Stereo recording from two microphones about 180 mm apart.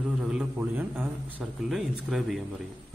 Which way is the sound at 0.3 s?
5° right (ahead or behind).